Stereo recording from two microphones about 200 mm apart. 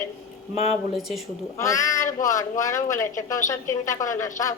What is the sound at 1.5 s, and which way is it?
A woman's voice, 15° left (ahead or behind).